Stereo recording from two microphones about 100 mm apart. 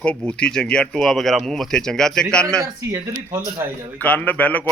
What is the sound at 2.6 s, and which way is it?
Speech, 30° right (ahead or behind).